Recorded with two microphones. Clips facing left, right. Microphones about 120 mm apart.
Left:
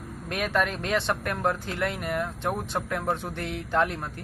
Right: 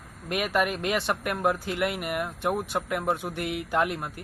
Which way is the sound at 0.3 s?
10° right (ahead or behind).